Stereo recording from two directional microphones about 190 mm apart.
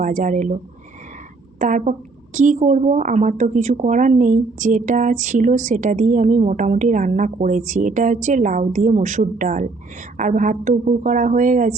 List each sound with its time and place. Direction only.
0.0 s speech: 40° right (ahead or behind)
1.5 s a woman's voice: 40° right (ahead or behind)